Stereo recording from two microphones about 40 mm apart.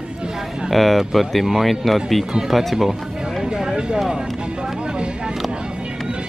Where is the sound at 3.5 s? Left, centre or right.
Centre.